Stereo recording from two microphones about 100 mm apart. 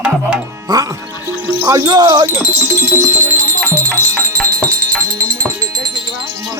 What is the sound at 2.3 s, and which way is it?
Music, 25° right (ahead or behind).